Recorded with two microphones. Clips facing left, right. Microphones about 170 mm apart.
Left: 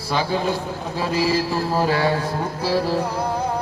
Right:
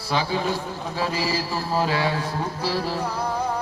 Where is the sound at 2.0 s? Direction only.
25° left (ahead or behind).